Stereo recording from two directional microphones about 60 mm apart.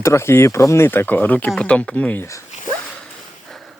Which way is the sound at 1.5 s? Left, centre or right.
Centre.